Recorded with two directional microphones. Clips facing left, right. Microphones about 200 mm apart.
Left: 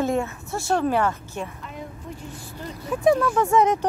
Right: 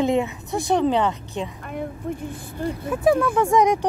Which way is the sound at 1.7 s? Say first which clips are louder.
Right 11 dB; 55° right (ahead or behind).